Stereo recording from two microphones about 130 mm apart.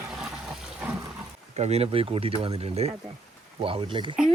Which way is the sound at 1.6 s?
55° right (ahead or behind).